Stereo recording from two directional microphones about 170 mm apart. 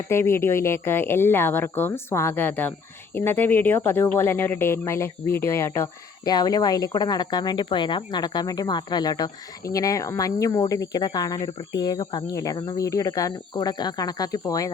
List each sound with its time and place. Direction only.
0.1 s speech: 15° left (ahead or behind)